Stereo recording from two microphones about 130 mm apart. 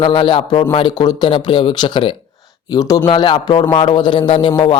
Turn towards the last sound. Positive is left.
turn(degrees=40)  # may be behind; listen again after turning